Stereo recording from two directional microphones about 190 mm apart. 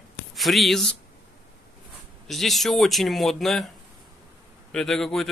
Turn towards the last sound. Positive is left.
turn(degrees=0)  # may be behind; listen again after turning